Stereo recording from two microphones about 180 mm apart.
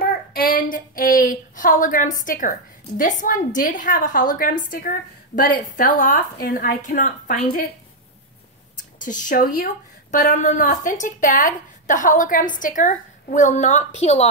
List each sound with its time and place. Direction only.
0.0 s a sound: 55° left (ahead or behind)
3.0 s speech: 45° left (ahead or behind)
9.0 s speech: 45° left (ahead or behind)